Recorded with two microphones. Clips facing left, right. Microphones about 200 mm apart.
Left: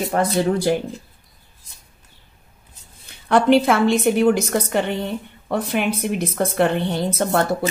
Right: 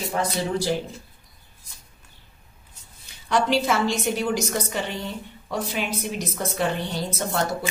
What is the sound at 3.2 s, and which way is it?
A woman's voice, 55° left (ahead or behind).